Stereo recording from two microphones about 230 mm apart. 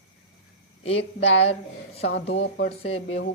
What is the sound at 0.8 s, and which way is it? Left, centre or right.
Speech, left.